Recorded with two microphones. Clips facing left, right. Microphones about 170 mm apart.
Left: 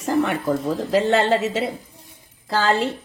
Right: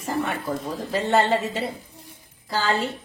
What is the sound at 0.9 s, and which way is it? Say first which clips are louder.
A woman's voice: left 3 dB; 85° left.